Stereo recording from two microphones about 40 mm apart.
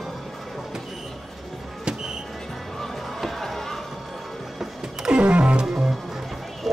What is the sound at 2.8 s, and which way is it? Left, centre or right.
Music, centre.